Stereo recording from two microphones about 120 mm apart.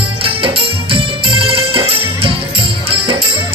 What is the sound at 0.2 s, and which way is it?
Music, 50° right (ahead or behind).